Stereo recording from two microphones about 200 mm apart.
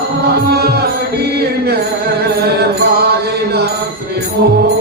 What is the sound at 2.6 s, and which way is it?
Mantra, 55° right (ahead or behind).